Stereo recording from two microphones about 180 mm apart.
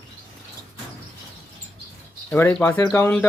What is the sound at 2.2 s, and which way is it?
Speech, 10° left (ahead or behind).